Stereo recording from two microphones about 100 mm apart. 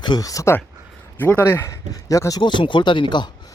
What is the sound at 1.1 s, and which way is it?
Speech, 20° left (ahead or behind).